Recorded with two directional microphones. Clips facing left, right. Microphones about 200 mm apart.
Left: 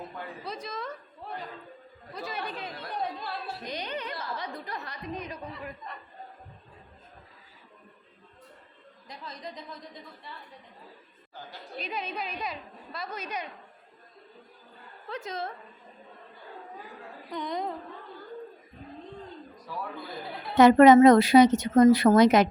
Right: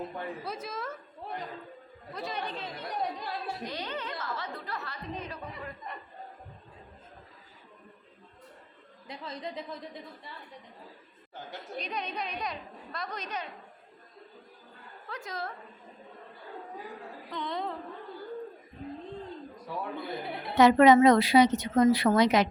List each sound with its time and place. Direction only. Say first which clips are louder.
0.4 s a woman's voice: even; 5° right (ahead or behind)
2.1 s a woman's voice: even; 5° left (ahead or behind)
3.7 s speech: left 1 dB; 15° left (ahead or behind)
9.0 s speech: right 3 dB; 25° right (ahead or behind)
11.8 s a woman's voice: left 1 dB; 5° left (ahead or behind)
15.1 s a woman's voice: left 3 dB; 20° left (ahead or behind)
17.3 s speech: left 2 dB; 15° left (ahead or behind)
20.1 s a sound: right 3 dB; 25° right (ahead or behind)
20.6 s a woman's voice: left 4 dB; 50° left (ahead or behind)